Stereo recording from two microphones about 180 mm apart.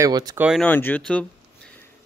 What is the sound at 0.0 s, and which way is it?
Speech, 20° right (ahead or behind).